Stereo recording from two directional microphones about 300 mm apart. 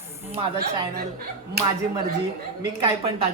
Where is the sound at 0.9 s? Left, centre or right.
Right.